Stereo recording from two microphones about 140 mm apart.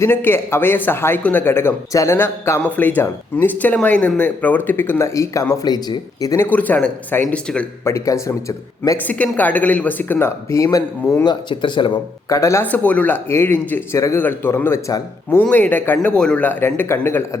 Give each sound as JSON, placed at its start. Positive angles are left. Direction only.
{"t": 0.0, "sound": "speech", "side_deg": 15}
{"t": 7.9, "sound": "speech", "side_deg": 20}
{"t": 9.0, "sound": "speech", "side_deg": 10}
{"t": 12.3, "sound": "speech", "side_deg": 20}